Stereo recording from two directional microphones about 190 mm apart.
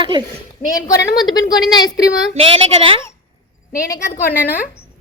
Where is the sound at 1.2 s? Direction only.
20° left (ahead or behind).